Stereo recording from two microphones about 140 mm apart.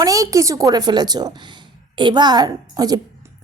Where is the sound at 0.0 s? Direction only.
25° right (ahead or behind).